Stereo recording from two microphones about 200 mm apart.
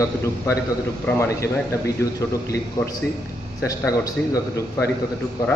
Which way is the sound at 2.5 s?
15° left (ahead or behind).